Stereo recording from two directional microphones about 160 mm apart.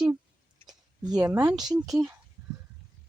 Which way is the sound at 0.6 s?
25° right (ahead or behind).